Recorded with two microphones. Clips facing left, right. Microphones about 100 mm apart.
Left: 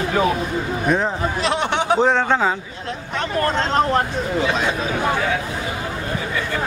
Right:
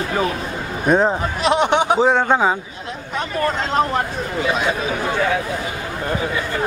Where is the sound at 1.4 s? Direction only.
15° right (ahead or behind).